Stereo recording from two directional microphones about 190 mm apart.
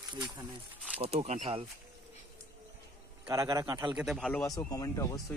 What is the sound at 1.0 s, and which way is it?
Speech, 35° right (ahead or behind).